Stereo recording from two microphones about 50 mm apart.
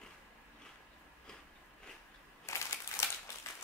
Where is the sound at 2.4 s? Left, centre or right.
Left.